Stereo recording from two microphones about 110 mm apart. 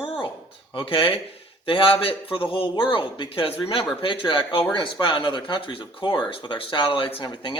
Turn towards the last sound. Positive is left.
turn(degrees=50)  # may be behind; listen again after turning